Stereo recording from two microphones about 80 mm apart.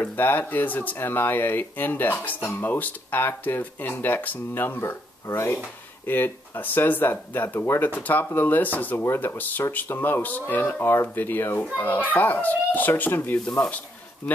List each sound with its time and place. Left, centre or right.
0.0 s speech: left